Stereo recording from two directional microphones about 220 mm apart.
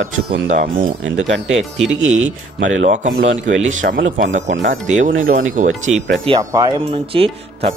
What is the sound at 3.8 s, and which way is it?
Speech, 45° right (ahead or behind).